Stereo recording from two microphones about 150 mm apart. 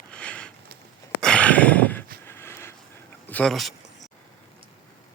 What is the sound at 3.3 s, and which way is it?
Speech, 5° left (ahead or behind).